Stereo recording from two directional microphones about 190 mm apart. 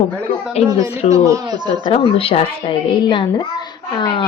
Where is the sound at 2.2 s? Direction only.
30° left (ahead or behind).